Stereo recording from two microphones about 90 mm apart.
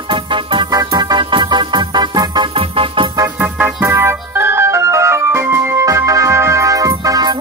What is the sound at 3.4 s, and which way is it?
Organ, 20° right (ahead or behind).